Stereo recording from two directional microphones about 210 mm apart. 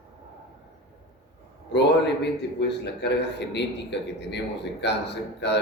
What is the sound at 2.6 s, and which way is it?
A man's voice, 55° left (ahead or behind).